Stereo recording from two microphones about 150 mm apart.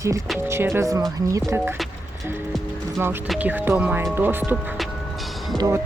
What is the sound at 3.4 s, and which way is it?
Speech, 10° right (ahead or behind).